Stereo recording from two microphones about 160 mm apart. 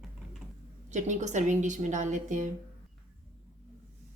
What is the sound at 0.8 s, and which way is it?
A woman's voice, 50° right (ahead or behind).